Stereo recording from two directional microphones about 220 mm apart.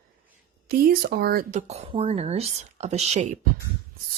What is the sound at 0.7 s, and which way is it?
Speech, 45° right (ahead or behind).